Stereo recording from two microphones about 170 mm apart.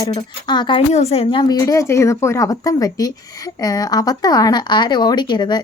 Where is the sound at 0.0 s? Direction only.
30° left (ahead or behind).